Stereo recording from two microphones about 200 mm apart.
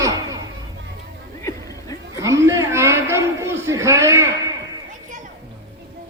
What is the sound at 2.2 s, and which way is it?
A man's voice, 15° right (ahead or behind).